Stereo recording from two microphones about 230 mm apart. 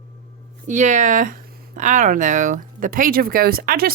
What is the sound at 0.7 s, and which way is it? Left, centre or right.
Speech, right.